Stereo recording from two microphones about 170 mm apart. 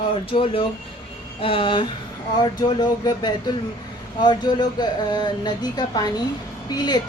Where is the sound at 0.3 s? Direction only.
30° left (ahead or behind).